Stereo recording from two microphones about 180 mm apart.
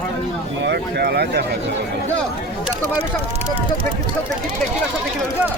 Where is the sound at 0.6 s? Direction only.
65° right (ahead or behind).